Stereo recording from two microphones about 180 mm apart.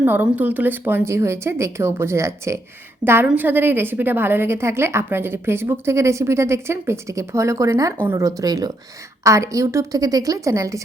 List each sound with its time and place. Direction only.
0.0 s a woman's voice: 10° right (ahead or behind)